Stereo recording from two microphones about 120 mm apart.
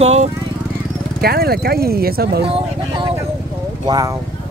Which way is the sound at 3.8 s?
35° right (ahead or behind).